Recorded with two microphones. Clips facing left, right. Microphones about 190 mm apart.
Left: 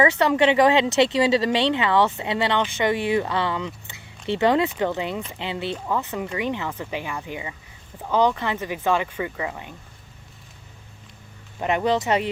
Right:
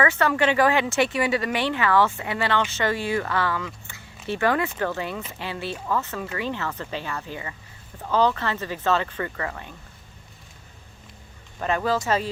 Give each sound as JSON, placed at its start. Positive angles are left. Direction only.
{"t": 0.0, "sound": "speech", "side_deg": 20}
{"t": 11.6, "sound": "speech", "side_deg": 20}